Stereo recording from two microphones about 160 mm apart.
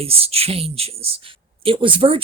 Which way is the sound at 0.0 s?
35° right (ahead or behind).